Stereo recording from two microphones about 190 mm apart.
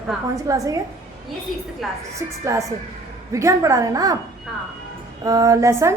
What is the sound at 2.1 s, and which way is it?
A woman's voice, 15° right (ahead or behind).